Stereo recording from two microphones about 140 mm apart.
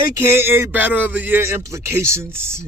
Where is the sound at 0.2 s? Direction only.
15° right (ahead or behind).